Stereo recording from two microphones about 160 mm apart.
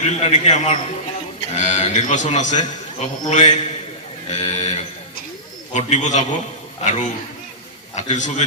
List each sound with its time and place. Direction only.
0.0 s a man's voice: 45° left (ahead or behind)